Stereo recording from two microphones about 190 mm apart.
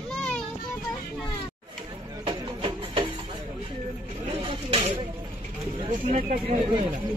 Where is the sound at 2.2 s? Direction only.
30° right (ahead or behind).